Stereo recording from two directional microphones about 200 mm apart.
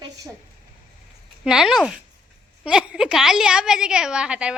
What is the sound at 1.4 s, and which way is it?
A woman's voice, centre (ahead or behind).